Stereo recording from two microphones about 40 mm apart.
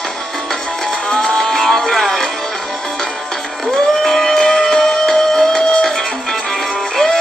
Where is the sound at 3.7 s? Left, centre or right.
Centre.